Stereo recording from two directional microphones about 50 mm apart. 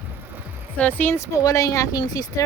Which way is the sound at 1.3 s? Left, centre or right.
Left.